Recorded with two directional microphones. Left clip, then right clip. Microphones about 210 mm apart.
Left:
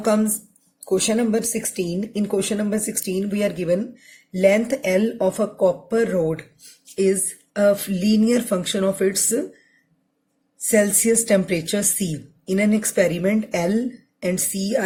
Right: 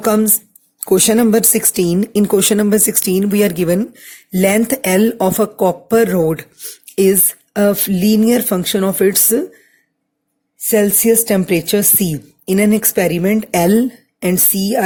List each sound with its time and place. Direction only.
0.0 s a woman's voice: 50° right (ahead or behind)
10.7 s a woman's voice: 35° right (ahead or behind)